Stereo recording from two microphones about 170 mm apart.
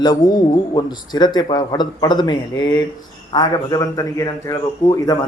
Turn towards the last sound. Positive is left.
turn(degrees=20)  # may be behind; listen again after turning